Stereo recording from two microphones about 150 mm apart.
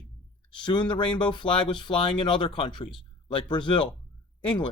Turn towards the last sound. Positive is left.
turn(degrees=35)  # may be behind; listen again after turning